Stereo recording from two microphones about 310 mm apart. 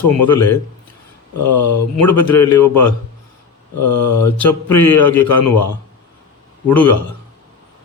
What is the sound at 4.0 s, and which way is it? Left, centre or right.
Speech, left.